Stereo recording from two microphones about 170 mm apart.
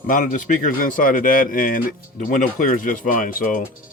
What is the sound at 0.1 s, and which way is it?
Speech, 50° left (ahead or behind).